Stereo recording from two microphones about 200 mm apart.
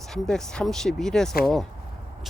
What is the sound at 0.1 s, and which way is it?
Speech, 5° left (ahead or behind).